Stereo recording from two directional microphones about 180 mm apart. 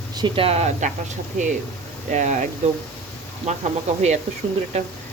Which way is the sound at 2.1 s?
45° right (ahead or behind).